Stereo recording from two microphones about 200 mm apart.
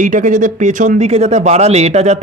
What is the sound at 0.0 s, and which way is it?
A man's voice, 40° right (ahead or behind).